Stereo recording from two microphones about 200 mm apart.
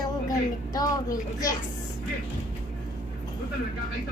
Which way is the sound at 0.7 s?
15° left (ahead or behind).